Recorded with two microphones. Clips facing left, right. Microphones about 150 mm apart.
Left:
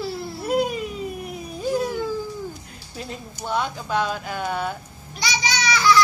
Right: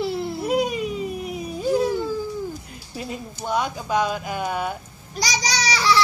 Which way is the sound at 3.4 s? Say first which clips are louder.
Right 1 dB; 10° right (ahead or behind).